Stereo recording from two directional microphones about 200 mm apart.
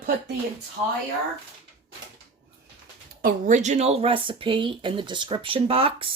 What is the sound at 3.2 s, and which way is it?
Speech, 45° right (ahead or behind).